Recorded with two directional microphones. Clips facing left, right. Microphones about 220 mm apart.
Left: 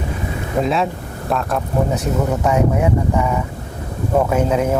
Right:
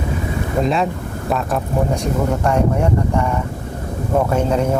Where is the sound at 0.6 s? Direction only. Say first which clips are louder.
Even; centre (ahead or behind).